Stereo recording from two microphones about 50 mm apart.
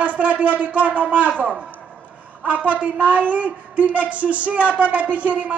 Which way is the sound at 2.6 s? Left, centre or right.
Right.